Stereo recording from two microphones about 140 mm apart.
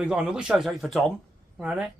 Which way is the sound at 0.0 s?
5° right (ahead or behind).